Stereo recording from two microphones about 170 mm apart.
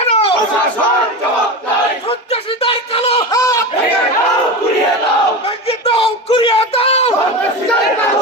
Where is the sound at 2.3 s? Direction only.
35° left (ahead or behind).